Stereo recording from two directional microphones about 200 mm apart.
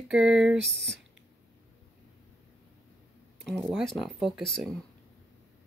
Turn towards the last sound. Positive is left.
turn(degrees=0)  # may be behind; listen again after turning